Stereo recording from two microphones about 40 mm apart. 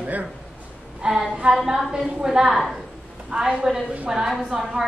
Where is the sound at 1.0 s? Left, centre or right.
Centre.